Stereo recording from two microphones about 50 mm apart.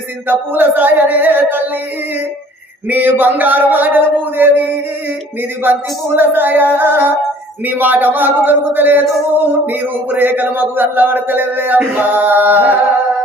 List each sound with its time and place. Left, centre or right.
0.3 s speech: right
2.9 s speech: right
6.1 s music: right
7.7 s speech: right